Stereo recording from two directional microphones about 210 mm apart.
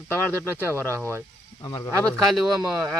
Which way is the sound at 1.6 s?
20° left (ahead or behind).